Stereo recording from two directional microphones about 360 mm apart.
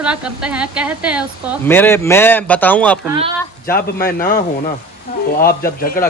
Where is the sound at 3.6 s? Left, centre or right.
Left.